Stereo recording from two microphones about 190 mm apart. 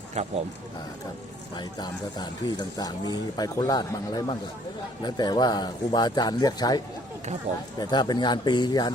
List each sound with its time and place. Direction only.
0.1 s speech: 35° right (ahead or behind)
1.5 s speech: 20° left (ahead or behind)